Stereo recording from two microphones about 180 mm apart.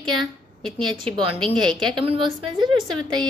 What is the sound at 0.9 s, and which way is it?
A woman's voice, 30° right (ahead or behind).